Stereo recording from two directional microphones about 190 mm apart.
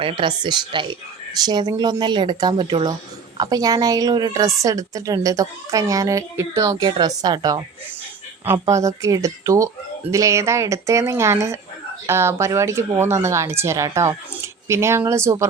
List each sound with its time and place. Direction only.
0.0 s a woman's voice: 25° right (ahead or behind)